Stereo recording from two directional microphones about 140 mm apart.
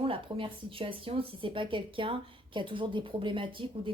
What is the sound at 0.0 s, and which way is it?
Speech, 40° right (ahead or behind).